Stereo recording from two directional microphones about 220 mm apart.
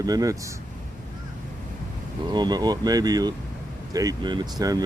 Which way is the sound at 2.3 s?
20° right (ahead or behind).